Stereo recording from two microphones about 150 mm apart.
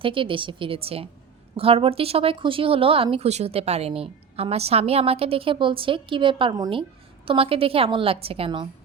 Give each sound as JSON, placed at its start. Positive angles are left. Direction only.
{"t": 0.0, "sound": "speech", "side_deg": -35}